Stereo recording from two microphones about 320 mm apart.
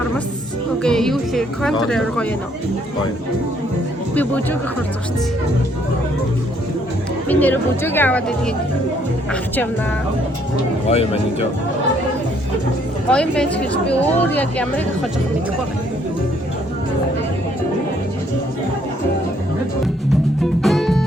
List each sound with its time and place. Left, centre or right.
0.8 s speech: centre
4.1 s speech: centre
7.3 s speech: centre
10.8 s speech: centre
13.1 s speech: centre
20.4 s music: centre